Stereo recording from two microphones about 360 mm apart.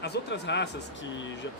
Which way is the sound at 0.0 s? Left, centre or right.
Left.